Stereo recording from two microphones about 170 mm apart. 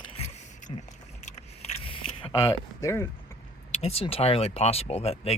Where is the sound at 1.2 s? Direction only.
35° left (ahead or behind).